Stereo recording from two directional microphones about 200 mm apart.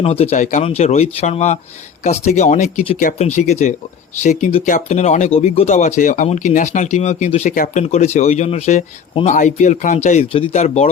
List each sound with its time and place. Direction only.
0.0 s speech: 30° left (ahead or behind)